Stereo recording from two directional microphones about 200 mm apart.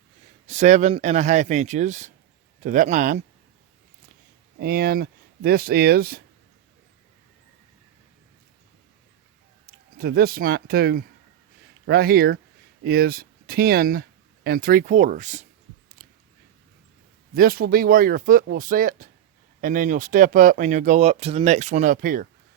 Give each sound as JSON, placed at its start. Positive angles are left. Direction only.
{"t": 0.4, "sound": "speech", "side_deg": -35}
{"t": 4.6, "sound": "speech", "side_deg": -50}
{"t": 9.6, "sound": "speech", "side_deg": -50}
{"t": 17.3, "sound": "speech", "side_deg": -45}